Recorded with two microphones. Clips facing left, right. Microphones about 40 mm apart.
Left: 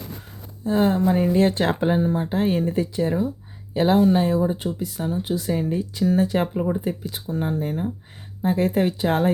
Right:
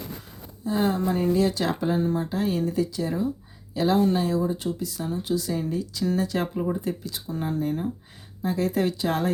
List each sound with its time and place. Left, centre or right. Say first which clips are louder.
0.6 s speech: left 5 dB; left
1.4 s speech: left 4 dB; left; by 7.9 s centre
8.4 s speech: left 4 dB; left